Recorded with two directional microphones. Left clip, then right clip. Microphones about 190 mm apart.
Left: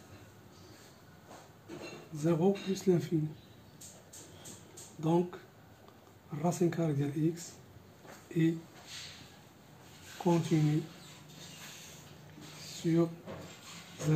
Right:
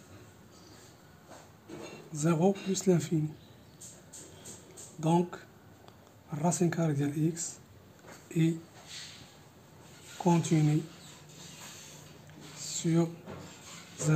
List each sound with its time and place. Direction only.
2.1 s speech: 50° right (ahead or behind)
5.0 s speech: 50° right (ahead or behind)
10.2 s speech: 55° right (ahead or behind)
12.6 s a sound: 50° right (ahead or behind)